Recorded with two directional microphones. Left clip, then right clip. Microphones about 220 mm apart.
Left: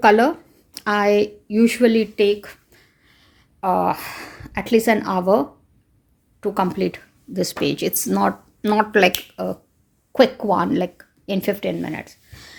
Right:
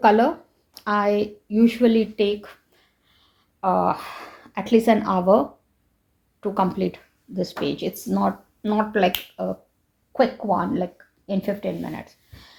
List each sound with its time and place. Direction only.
0.0 s a sound: 30° left (ahead or behind)
4.7 s speech: 25° left (ahead or behind)
10.1 s speech: 50° left (ahead or behind); by 12.5 s 30° left (ahead or behind)